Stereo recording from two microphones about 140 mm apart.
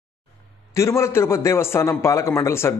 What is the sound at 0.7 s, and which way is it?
A man's voice, 20° left (ahead or behind).